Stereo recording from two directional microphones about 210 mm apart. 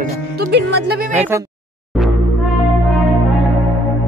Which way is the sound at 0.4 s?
50° right (ahead or behind).